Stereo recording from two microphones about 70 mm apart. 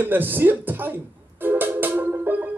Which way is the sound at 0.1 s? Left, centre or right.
Right.